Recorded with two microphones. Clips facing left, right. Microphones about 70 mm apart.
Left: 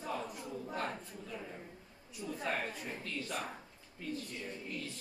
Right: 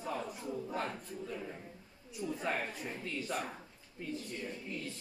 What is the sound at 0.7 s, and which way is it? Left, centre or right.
Speech, centre.